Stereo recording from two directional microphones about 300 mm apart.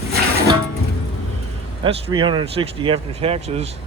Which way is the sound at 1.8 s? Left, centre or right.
Centre.